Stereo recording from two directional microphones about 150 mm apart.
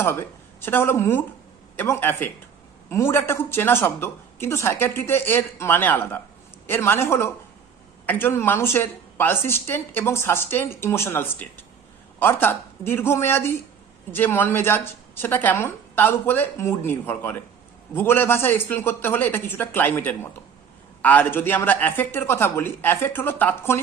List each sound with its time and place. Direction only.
0.0 s a woman's voice: 15° left (ahead or behind)